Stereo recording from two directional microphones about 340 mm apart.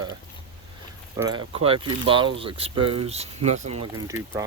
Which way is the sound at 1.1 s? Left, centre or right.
Centre.